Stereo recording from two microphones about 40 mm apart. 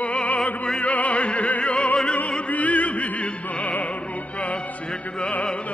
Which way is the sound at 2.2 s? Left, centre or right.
Left.